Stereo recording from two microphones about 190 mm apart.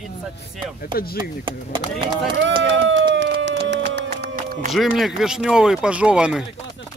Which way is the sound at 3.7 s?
65° right (ahead or behind).